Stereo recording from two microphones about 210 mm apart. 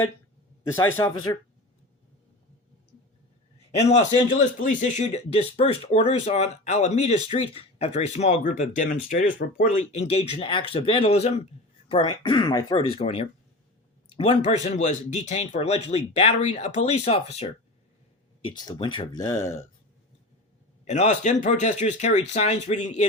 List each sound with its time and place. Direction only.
0.9 s speech: 15° left (ahead or behind)
4.4 s speech: 35° left (ahead or behind); by 19.6 s 15° left (ahead or behind)
20.8 s speech: 35° left (ahead or behind)